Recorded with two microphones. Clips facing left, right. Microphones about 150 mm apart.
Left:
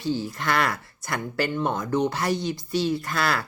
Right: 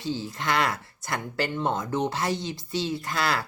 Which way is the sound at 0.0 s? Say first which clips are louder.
Left 3 dB; 25° right (ahead or behind).